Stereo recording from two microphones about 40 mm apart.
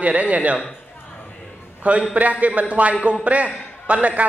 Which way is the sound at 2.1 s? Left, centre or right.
Right.